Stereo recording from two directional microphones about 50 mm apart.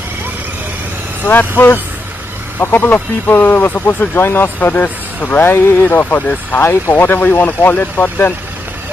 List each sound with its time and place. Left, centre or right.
1.2 s speech: left
2.6 s speech: left
5.4 s speech: left
6.6 s speech: left